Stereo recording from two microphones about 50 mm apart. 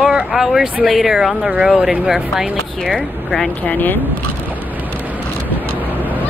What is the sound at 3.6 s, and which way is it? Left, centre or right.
Speech, left.